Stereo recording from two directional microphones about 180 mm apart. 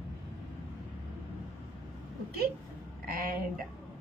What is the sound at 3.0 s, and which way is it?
Speech, 55° right (ahead or behind).